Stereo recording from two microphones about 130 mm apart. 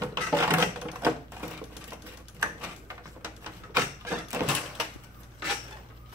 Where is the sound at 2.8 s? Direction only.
15° right (ahead or behind).